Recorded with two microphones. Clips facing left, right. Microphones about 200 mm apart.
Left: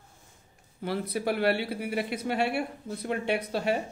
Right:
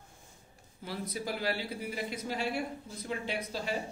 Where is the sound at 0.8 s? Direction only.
60° left (ahead or behind).